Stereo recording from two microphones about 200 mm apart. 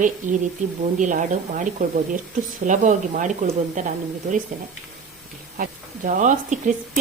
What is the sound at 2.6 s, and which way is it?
Speech, 40° right (ahead or behind).